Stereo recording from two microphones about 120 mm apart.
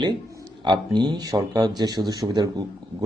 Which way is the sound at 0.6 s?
40° right (ahead or behind).